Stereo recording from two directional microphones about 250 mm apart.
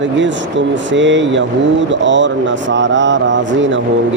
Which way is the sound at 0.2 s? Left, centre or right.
Right.